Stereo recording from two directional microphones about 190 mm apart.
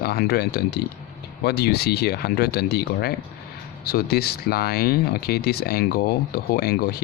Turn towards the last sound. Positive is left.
turn(degrees=55)  # may be behind; listen again after turning